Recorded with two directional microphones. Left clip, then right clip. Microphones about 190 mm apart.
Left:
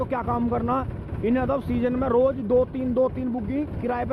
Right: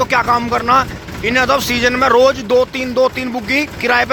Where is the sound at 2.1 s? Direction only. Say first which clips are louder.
Right 7 dB; 35° right (ahead or behind).